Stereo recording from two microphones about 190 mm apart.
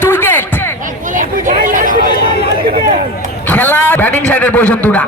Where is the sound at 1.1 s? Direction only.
45° right (ahead or behind).